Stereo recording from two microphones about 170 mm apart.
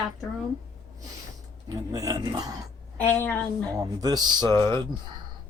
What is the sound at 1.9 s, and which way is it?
Speech, 20° right (ahead or behind).